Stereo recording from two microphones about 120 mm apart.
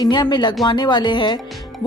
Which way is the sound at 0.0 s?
40° left (ahead or behind).